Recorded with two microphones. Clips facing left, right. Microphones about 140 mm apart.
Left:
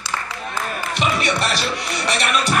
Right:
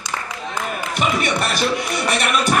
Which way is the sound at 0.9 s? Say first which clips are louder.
Right 1 dB; 50° right (ahead or behind).